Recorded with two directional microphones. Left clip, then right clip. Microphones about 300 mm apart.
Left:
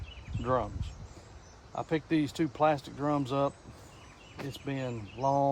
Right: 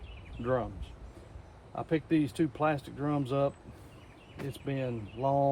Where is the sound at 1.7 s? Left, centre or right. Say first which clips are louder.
Right 1 dB; centre.